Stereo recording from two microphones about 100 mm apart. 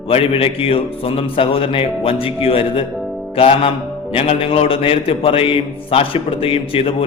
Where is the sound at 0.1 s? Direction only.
70° left (ahead or behind).